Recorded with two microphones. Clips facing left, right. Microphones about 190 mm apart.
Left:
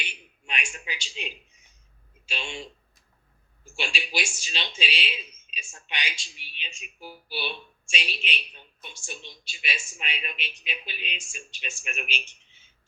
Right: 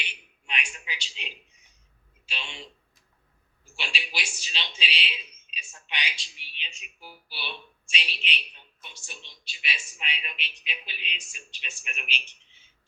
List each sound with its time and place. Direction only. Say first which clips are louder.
0.0 s a sound: left 2 dB; 45° left (ahead or behind)
2.2 s a man's voice: left 5 dB; 45° left (ahead or behind)
3.8 s speech: left 5 dB; 45° left (ahead or behind)